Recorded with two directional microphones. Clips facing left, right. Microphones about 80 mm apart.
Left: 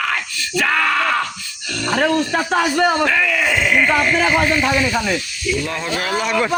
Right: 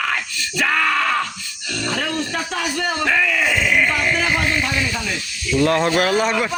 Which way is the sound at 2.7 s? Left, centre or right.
Left.